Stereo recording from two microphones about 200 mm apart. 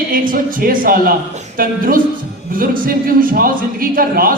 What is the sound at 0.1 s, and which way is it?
A woman's voice, 45° right (ahead or behind).